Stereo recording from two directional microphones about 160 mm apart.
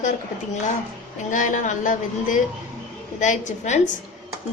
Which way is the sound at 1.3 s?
55° left (ahead or behind).